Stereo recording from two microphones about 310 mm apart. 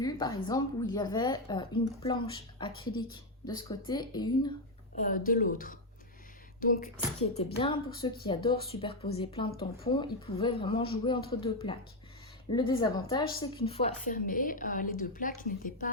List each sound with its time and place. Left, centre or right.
0.0 s a woman's voice: centre
4.9 s a woman's voice: left
7.3 s a woman's voice: centre